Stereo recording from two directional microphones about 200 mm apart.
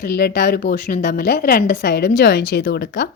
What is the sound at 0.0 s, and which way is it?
A woman's voice, 50° left (ahead or behind).